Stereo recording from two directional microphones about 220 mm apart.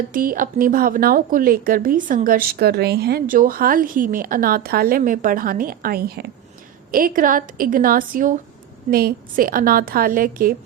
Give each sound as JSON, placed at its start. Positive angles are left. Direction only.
{"t": 0.1, "sound": "a woman's voice", "side_deg": -40}